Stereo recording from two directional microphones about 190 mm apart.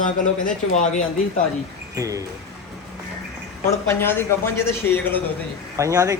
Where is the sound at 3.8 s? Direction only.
10° left (ahead or behind).